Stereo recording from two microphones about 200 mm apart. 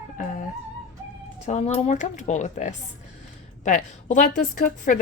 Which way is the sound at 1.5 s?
35° left (ahead or behind).